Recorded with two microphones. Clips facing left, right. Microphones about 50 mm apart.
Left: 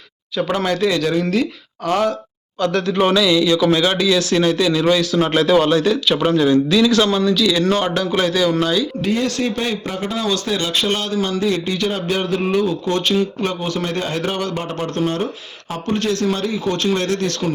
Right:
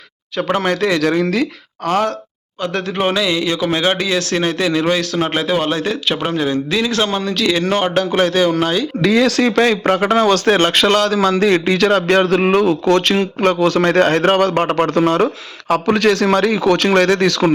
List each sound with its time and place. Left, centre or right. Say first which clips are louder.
0.3 s speech: right 2 dB; right
1.9 s speech: right 1 dB; right
2.7 s a man's voice: left 1 dB; right
5.2 s a man's voice: left 3 dB; right
9.0 s speech: right 6 dB; right
15.7 s a man's voice: right 7 dB; right